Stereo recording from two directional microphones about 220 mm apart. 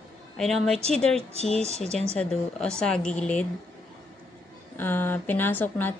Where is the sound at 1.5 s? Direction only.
30° right (ahead or behind).